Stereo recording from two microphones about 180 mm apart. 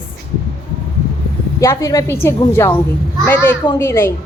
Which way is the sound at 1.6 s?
20° left (ahead or behind).